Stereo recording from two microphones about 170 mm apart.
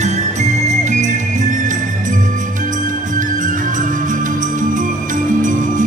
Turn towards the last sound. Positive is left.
turn(degrees=-50)  # may be behind; listen again after turning